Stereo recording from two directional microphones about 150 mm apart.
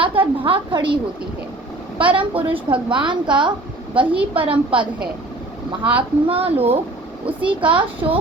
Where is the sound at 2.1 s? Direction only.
35° right (ahead or behind).